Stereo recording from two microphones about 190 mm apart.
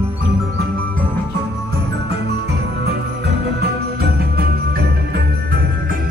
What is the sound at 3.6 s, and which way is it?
Jingle bell, 55° right (ahead or behind).